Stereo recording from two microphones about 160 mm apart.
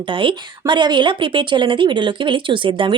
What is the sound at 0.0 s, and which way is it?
Speech, 30° right (ahead or behind).